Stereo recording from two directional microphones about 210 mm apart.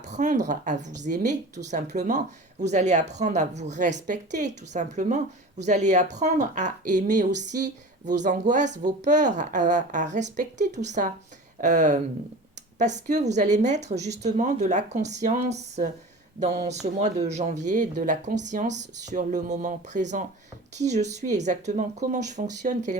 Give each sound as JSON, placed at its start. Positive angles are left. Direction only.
{"t": 0.0, "sound": "a woman's voice", "side_deg": -35}